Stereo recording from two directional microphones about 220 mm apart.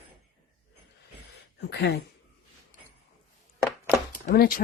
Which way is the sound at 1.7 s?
50° left (ahead or behind).